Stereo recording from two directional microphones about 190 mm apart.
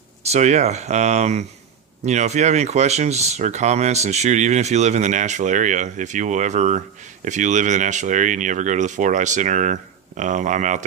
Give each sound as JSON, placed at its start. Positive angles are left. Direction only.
{"t": 0.2, "sound": "speech", "side_deg": -35}